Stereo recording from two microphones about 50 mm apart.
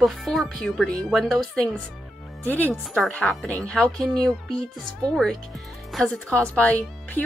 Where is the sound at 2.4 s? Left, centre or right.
Left.